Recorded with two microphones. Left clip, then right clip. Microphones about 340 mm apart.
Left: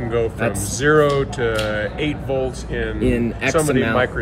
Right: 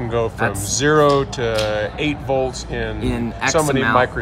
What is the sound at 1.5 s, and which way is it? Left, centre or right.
Speech, right.